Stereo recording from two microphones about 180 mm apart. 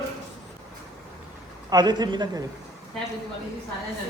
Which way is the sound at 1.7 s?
25° right (ahead or behind).